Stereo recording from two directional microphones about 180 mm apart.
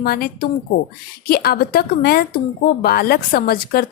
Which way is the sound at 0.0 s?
55° left (ahead or behind).